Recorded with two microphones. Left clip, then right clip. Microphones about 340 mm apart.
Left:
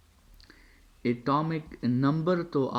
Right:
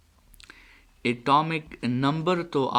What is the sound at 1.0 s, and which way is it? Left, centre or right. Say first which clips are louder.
Speech: right 6 dB; right.